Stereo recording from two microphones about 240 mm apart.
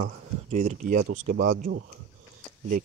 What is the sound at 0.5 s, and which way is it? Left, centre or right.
Speech, right.